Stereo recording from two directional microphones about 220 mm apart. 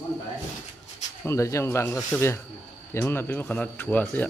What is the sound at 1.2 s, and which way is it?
Speech, 15° left (ahead or behind).